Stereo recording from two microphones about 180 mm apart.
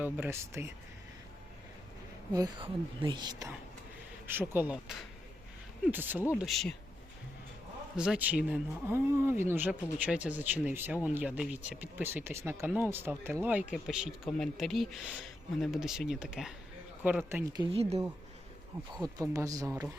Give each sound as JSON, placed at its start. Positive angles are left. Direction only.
{"t": 0.0, "sound": "speech", "side_deg": -15}
{"t": 2.3, "sound": "speech", "side_deg": -25}
{"t": 4.3, "sound": "speech", "side_deg": -10}
{"t": 6.4, "sound": "speech", "side_deg": 0}
{"t": 7.9, "sound": "speech", "side_deg": -5}
{"t": 17.7, "sound": "speech", "side_deg": -35}
{"t": 19.2, "sound": "speech", "side_deg": -20}